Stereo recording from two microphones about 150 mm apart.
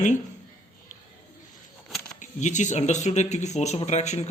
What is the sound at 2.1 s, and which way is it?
Speech, 55° left (ahead or behind).